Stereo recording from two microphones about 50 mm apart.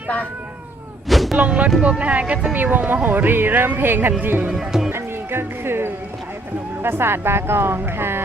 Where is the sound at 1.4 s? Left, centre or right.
Right.